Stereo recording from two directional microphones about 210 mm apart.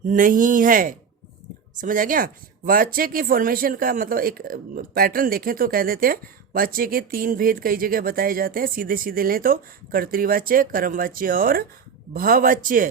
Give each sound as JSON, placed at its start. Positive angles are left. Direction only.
{"t": 0.1, "sound": "speech", "side_deg": -40}